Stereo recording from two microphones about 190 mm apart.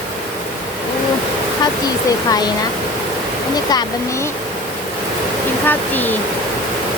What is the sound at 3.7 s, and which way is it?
Speech, 20° left (ahead or behind).